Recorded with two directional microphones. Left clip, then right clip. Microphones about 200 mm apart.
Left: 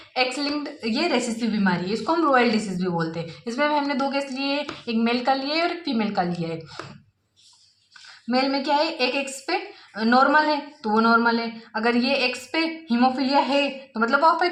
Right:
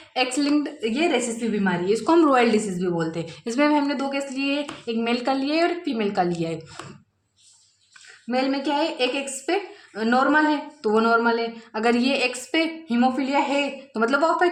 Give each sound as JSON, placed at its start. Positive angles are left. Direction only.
{"t": 0.3, "sound": "a woman's voice", "side_deg": -25}
{"t": 1.9, "sound": "a woman's voice", "side_deg": -30}
{"t": 6.3, "sound": "speech", "side_deg": -30}
{"t": 8.3, "sound": "a woman's voice", "side_deg": -20}